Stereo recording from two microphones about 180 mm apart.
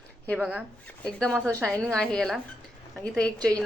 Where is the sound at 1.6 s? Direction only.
5° left (ahead or behind).